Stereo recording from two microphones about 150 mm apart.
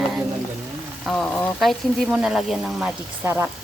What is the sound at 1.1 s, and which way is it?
Speech, 10° left (ahead or behind).